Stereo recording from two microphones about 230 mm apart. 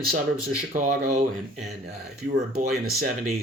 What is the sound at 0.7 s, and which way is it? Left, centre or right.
Speech, right.